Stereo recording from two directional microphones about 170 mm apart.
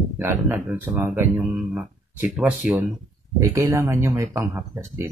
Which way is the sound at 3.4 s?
20° right (ahead or behind).